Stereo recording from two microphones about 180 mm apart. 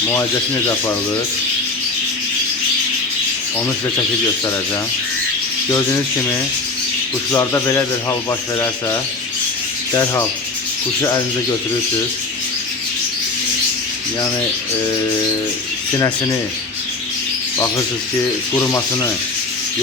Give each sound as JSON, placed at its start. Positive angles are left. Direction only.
{"t": 5.7, "sound": "rub", "side_deg": 15}
{"t": 8.3, "sound": "speech", "side_deg": 20}
{"t": 9.9, "sound": "rub", "side_deg": 15}
{"t": 16.0, "sound": "speech", "side_deg": 20}
{"t": 18.5, "sound": "rub", "side_deg": 10}